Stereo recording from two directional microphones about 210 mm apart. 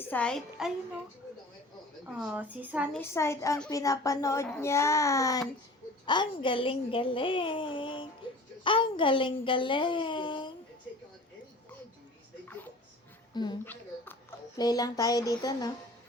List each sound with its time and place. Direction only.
0.0 s a woman's voice: 5° left (ahead or behind)
2.0 s a woman's voice: 5° right (ahead or behind)
3.0 s a child's voice: 15° left (ahead or behind)
13.3 s a child's voice: 20° left (ahead or behind)
13.7 s speech: 10° left (ahead or behind)